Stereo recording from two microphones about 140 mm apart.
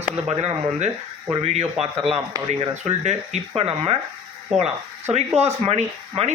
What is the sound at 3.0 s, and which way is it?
Speech, 50° right (ahead or behind).